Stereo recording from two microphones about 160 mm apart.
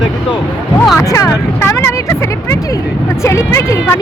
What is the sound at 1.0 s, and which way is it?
Speech, 20° left (ahead or behind).